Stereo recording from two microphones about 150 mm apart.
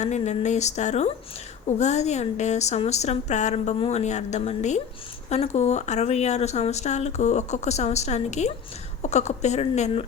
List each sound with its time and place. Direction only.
0.0 s speech: 50° left (ahead or behind)